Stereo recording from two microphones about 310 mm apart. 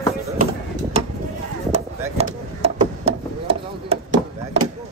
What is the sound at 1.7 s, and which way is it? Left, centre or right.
Chop, centre.